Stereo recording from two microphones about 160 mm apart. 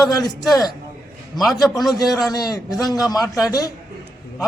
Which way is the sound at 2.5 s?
25° left (ahead or behind).